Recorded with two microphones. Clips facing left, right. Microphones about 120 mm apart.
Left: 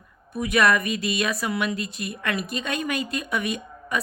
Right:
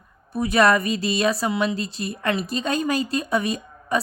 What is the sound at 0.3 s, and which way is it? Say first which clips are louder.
A woman's voice: right 3 dB; 35° right (ahead or behind).